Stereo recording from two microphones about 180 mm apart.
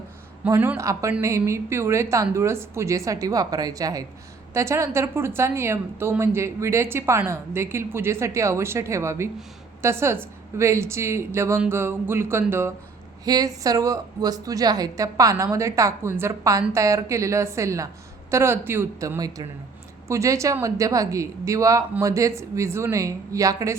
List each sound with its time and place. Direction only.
0.4 s a woman's voice: 10° right (ahead or behind)